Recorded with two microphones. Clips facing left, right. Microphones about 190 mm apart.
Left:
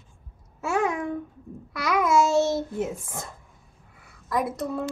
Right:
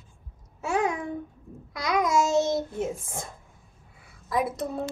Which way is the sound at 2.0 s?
20° right (ahead or behind).